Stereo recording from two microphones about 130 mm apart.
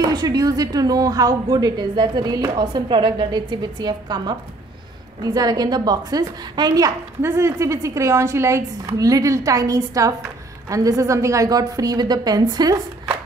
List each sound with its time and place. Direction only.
0.0 s a woman's voice: 30° right (ahead or behind)